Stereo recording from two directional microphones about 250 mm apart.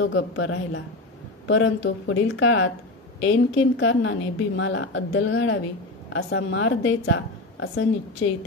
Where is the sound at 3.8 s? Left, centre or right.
Left.